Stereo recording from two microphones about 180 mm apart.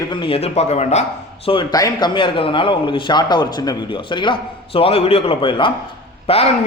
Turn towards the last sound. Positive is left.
turn(degrees=35)  # may be behind; listen again after turning